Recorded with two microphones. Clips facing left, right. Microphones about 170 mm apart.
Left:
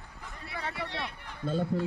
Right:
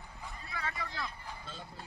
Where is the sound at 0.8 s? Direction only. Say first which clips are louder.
Left 4 dB; 75° left (ahead or behind).